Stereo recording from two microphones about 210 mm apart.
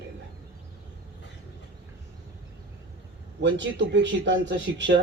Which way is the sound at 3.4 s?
60° right (ahead or behind).